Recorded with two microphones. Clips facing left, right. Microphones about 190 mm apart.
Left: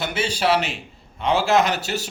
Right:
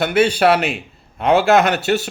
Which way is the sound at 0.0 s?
60° right (ahead or behind).